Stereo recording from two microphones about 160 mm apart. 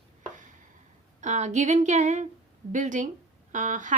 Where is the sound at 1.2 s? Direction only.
50° right (ahead or behind).